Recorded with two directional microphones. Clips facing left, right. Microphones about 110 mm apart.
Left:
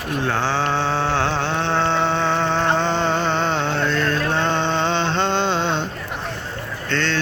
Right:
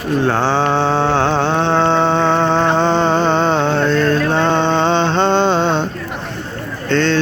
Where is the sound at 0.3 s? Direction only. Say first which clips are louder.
Right 4 dB; 30° right (ahead or behind).